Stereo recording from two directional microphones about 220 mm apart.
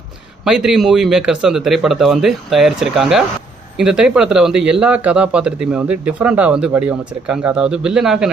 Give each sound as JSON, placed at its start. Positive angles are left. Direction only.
{"t": 0.4, "sound": "a man's voice", "side_deg": -5}